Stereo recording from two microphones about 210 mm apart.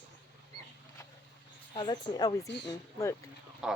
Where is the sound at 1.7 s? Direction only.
20° left (ahead or behind).